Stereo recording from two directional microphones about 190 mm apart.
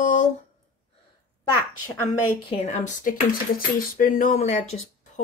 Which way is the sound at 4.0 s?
45° left (ahead or behind).